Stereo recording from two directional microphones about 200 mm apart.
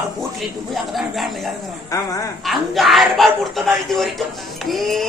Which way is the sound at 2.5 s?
Centre (ahead or behind).